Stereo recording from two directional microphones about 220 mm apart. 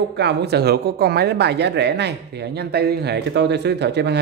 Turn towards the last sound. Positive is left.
turn(degrees=-50)  # may be behind; listen again after turning